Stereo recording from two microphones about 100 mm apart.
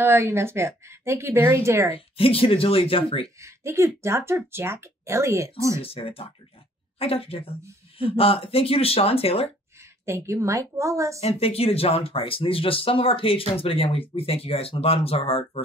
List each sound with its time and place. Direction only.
0.0 s a woman's voice: 25° right (ahead or behind)
2.0 s speech: 70° left (ahead or behind)
3.3 s a woman's voice: 30° right (ahead or behind)
5.8 s speech: 70° left (ahead or behind)
10.0 s a woman's voice: 30° right (ahead or behind)
11.1 s speech: 85° left